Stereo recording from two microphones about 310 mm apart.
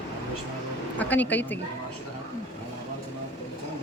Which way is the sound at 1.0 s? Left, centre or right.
Centre.